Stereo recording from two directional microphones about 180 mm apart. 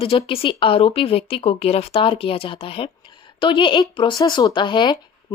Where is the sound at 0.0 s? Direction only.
30° left (ahead or behind).